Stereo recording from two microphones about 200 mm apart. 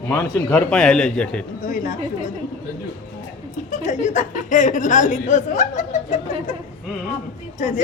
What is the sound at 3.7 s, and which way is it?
A woman's voice, 35° left (ahead or behind).